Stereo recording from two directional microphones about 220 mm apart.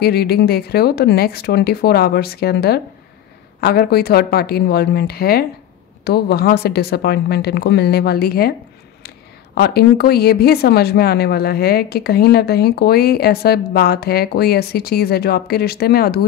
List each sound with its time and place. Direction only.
0.0 s speech: 45° left (ahead or behind)
9.6 s speech: 45° left (ahead or behind)